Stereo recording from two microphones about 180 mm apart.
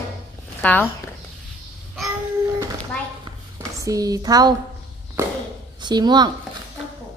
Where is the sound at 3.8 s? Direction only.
20° right (ahead or behind).